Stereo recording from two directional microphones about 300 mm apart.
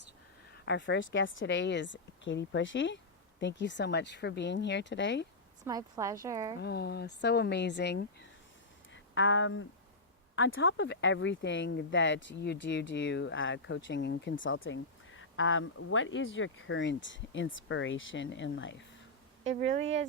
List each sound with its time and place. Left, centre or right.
0.6 s speech: left
5.6 s a woman's voice: centre
6.6 s speech: left
19.5 s speech: right